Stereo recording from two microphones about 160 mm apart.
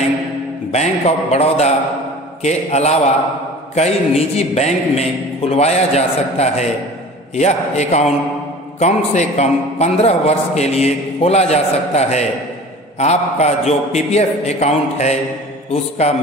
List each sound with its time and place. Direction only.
0.7 s a man's voice: 40° left (ahead or behind)